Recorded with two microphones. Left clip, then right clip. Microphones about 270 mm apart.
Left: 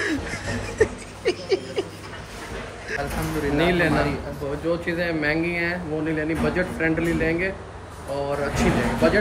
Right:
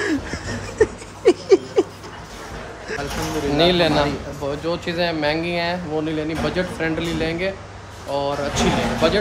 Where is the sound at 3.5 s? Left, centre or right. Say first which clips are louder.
Right 4 dB; right.